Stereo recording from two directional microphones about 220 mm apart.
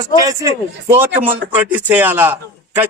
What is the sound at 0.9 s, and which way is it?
A man's voice, 10° right (ahead or behind).